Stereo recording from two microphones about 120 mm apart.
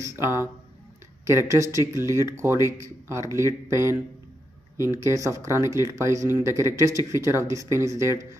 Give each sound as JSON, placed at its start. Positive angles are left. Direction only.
{"t": 0.0, "sound": "speech", "side_deg": -25}